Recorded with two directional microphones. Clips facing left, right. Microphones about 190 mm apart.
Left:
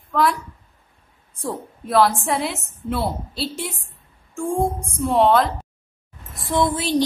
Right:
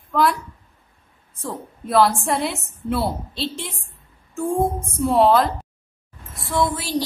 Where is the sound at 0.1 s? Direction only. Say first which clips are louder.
Even; centre (ahead or behind).